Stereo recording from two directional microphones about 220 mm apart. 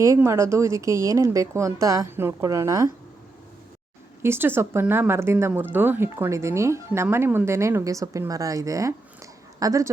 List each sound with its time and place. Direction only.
0.0 s speech: 15° right (ahead or behind)
4.2 s speech: 10° right (ahead or behind)